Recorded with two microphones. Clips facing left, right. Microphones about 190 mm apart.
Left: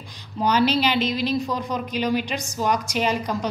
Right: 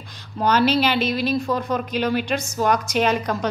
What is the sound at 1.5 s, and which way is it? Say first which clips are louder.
Speech: right 4 dB; 55° right (ahead or behind).